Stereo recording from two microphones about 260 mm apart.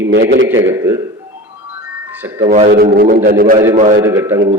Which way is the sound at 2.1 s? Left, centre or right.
Centre.